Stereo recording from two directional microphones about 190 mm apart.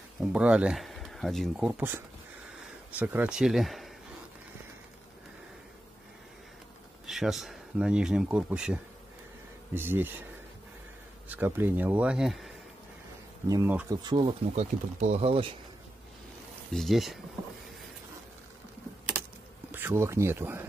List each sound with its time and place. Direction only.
0.2 s speech: 5° right (ahead or behind)
7.1 s speech: centre (ahead or behind)
11.2 s speech: 10° right (ahead or behind)
13.5 s speech: 15° right (ahead or behind)
14.5 s speech: 35° right (ahead or behind)
16.7 s speech: centre (ahead or behind)
19.7 s speech: 10° right (ahead or behind)